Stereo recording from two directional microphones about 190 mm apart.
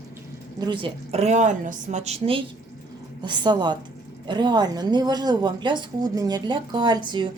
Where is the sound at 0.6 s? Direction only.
25° right (ahead or behind).